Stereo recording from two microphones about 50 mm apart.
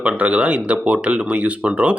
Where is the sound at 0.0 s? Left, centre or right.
Right.